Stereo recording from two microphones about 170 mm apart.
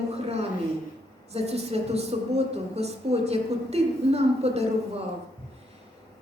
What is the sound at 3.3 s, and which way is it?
A woman's voice, 40° right (ahead or behind).